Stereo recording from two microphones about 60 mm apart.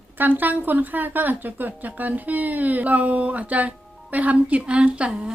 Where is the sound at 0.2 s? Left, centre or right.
Right.